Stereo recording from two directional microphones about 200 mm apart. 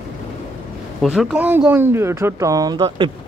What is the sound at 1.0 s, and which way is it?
Speech, centre (ahead or behind).